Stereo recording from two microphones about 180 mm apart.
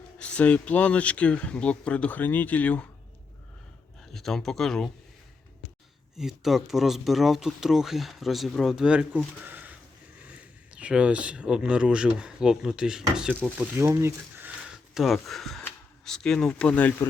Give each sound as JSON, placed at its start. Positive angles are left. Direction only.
{"t": 0.2, "sound": "speech", "side_deg": 5}
{"t": 4.1, "sound": "speech", "side_deg": 0}
{"t": 6.1, "sound": "speech", "side_deg": 0}
{"t": 14.9, "sound": "speech", "side_deg": 0}